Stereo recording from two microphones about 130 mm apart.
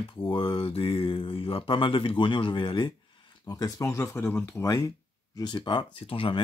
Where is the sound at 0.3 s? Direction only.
40° left (ahead or behind); by 4.8 s 25° left (ahead or behind).